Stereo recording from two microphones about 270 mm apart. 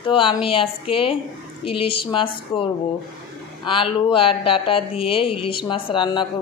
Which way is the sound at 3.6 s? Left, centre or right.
Centre.